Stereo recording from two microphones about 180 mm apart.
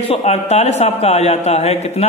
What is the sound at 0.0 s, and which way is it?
A man's voice, 35° left (ahead or behind).